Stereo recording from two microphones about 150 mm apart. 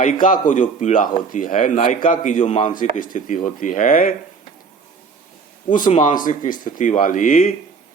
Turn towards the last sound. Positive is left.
turn(degrees=60)  # may be behind; listen again after turning